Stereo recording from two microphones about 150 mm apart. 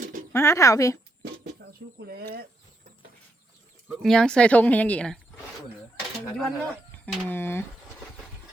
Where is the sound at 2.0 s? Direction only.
90° right.